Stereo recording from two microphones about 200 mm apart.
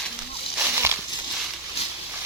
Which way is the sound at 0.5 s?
10° right (ahead or behind).